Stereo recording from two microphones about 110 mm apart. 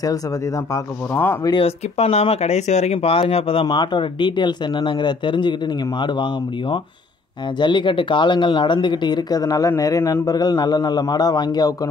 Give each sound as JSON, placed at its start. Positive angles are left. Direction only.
{"t": 1.1, "sound": "speech", "side_deg": 20}
{"t": 1.6, "sound": "speech", "side_deg": 65}